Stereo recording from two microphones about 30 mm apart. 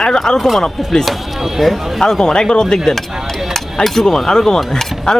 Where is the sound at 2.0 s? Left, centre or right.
Centre.